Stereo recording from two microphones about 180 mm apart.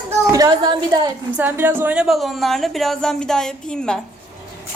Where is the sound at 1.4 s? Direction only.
10° right (ahead or behind).